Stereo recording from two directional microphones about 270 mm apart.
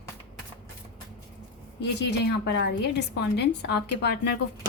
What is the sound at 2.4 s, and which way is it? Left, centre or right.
Speech, left.